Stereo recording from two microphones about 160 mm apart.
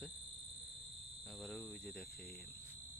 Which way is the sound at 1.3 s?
Centre (ahead or behind).